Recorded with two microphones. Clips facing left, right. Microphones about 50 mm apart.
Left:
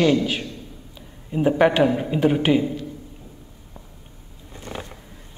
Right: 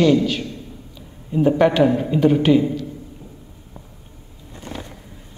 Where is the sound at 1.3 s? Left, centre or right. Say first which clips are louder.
Right 2 dB; centre.